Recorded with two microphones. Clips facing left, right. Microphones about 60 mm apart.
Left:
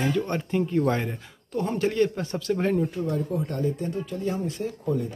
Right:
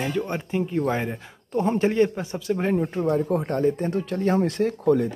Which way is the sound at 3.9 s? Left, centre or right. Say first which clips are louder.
Right 6 dB; right.